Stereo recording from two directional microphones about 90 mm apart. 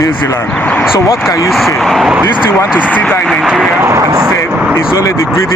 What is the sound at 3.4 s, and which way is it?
Speech, centre (ahead or behind).